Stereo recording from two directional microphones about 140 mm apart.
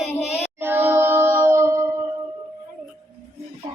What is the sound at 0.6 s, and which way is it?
Music, 15° right (ahead or behind).